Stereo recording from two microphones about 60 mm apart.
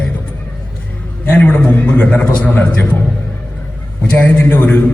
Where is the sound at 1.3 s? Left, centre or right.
Left.